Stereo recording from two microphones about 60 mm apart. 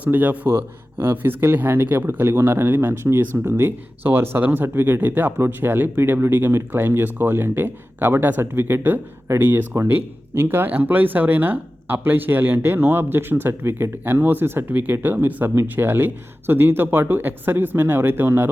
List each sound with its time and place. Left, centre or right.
0.0 s speech: right
0.4 s speech: right